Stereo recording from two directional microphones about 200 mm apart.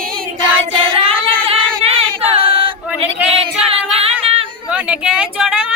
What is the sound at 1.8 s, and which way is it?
Choir, 30° right (ahead or behind).